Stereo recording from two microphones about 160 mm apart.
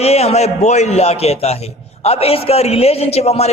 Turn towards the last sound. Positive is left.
turn(degrees=40)  # may be behind; listen again after turning